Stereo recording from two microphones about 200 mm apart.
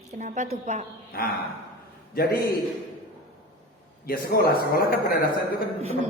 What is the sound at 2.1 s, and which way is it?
Speech, 50° left (ahead or behind).